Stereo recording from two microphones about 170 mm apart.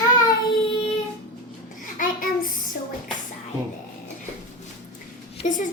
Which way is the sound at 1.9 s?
55° left (ahead or behind).